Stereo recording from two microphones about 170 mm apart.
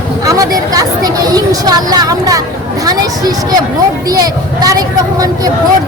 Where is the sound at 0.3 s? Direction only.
20° right (ahead or behind).